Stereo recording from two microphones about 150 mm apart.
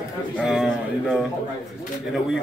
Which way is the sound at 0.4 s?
5° right (ahead or behind).